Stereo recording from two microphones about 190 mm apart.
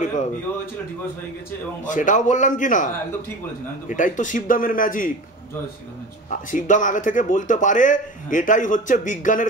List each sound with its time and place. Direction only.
1.9 s a man's voice: 40° left (ahead or behind)
3.9 s a man's voice: 45° left (ahead or behind)
6.3 s a man's voice: 40° left (ahead or behind)